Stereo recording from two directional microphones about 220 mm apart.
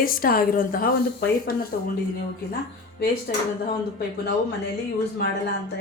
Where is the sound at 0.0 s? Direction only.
40° left (ahead or behind).